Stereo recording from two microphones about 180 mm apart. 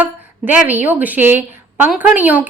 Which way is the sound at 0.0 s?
10° right (ahead or behind).